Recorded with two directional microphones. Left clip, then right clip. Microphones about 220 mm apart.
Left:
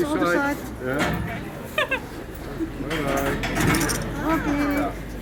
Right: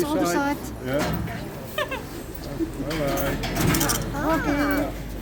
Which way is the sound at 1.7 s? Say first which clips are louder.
Left 4 dB; 15° left (ahead or behind).